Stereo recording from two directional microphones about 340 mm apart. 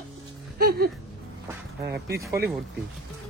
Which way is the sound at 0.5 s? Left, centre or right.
Right.